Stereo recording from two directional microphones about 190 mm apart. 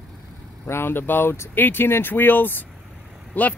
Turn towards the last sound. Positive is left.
turn(degrees=10)  # may be behind; listen again after turning